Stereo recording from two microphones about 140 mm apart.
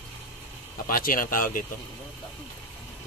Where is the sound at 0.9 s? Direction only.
90° left.